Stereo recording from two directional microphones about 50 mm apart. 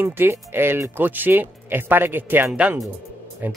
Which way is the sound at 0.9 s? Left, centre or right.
Right.